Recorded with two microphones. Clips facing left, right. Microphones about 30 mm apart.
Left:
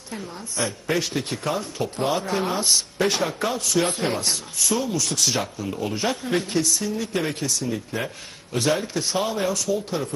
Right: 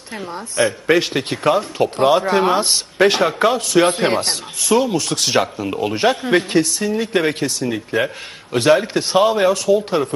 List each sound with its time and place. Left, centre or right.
0.1 s speech: right